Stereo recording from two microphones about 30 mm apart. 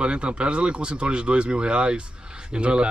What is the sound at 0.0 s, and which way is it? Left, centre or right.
Speech, right.